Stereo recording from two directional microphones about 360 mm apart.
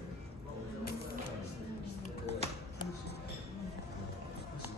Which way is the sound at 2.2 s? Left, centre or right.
Centre.